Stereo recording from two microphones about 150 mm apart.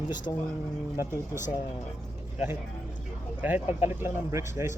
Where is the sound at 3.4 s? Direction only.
10° right (ahead or behind).